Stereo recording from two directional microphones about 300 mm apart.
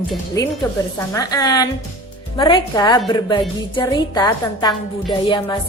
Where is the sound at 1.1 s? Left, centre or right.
Centre.